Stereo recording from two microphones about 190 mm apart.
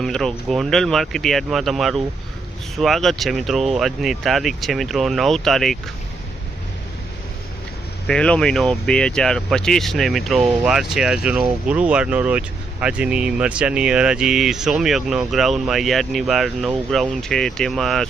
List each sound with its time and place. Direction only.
0.0 s speech: 5° left (ahead or behind)
8.0 s speech: 5° left (ahead or behind)